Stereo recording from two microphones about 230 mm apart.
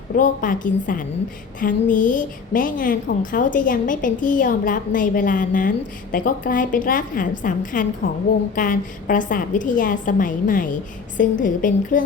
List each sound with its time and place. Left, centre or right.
0.2 s a woman's voice: left